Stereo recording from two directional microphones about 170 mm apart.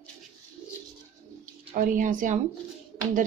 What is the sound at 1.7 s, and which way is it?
Speech, 50° right (ahead or behind).